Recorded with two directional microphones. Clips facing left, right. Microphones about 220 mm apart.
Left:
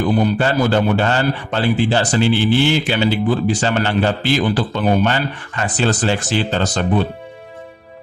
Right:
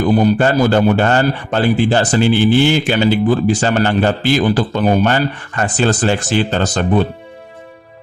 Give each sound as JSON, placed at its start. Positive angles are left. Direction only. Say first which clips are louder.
{"t": 0.2, "sound": "a man's voice", "louder": "right 4 dB", "side_deg": -45}